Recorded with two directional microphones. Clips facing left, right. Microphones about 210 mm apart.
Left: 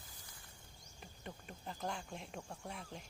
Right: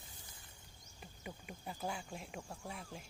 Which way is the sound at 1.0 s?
5° right (ahead or behind).